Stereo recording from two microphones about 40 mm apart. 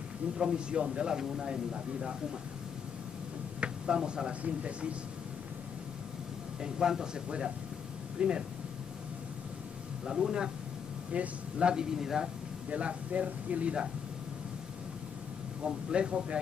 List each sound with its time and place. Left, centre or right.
0.4 s a man's voice: right
3.6 s speech: right
6.6 s speech: centre
7.2 s a man's voice: right
10.0 s speech: centre
11.1 s speech: right
12.6 s speech: right
15.6 s a man's voice: right